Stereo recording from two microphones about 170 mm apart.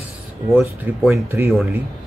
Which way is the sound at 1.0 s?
15° right (ahead or behind).